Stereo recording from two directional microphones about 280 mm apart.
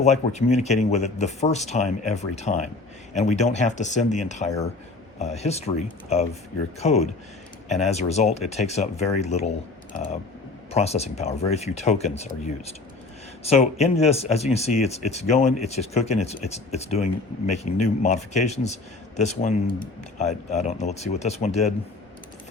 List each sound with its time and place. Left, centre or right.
0.0 s speech: left
10.7 s speech: left